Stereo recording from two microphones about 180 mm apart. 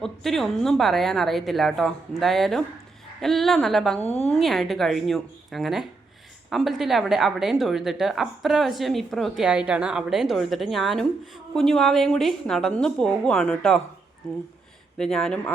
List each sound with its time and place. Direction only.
0.0 s a woman's voice: centre (ahead or behind)
4.0 s a woman's voice: 35° left (ahead or behind)
4.3 s a woman's voice: centre (ahead or behind)
14.9 s a woman's voice: 5° left (ahead or behind)